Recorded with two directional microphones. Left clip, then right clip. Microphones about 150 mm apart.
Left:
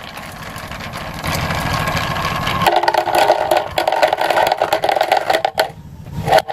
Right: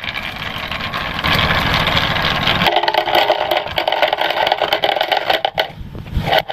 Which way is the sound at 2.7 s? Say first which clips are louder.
Left 5 dB; 30° left (ahead or behind).